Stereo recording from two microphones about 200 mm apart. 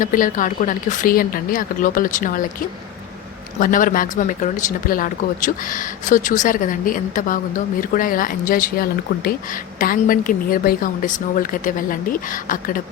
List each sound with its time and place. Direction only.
0.0 s a woman's voice: 40° left (ahead or behind)
3.6 s a woman's voice: 45° left (ahead or behind)